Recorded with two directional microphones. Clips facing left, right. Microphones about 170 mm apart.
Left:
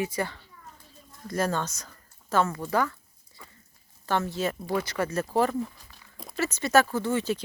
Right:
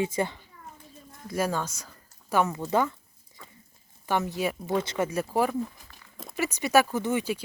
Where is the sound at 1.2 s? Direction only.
10° right (ahead or behind).